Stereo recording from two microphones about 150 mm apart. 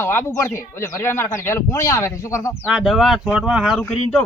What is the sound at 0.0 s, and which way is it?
Speech, 15° left (ahead or behind).